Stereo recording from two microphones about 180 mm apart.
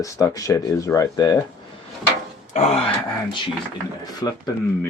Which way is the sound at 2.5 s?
40° left (ahead or behind).